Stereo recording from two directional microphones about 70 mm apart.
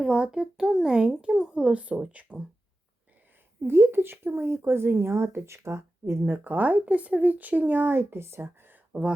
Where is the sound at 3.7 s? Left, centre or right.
Right.